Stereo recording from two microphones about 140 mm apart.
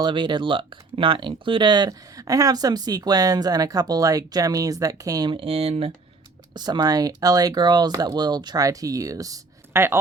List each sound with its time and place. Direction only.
0.0 s speech: 35° right (ahead or behind)
6.5 s speech: 30° right (ahead or behind)